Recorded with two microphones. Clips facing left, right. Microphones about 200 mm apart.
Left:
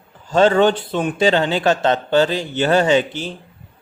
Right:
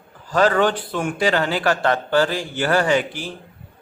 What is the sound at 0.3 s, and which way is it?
A man's voice, 25° left (ahead or behind).